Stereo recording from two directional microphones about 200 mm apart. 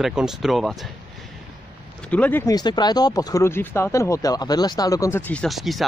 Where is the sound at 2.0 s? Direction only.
5° left (ahead or behind).